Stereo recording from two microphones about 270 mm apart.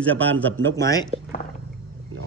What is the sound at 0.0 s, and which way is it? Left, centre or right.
A man's voice, centre.